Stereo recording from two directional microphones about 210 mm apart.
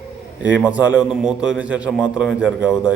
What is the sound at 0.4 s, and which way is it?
A man's voice, 5° right (ahead or behind).